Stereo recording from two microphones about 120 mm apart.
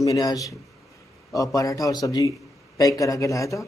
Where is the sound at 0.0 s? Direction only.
30° left (ahead or behind).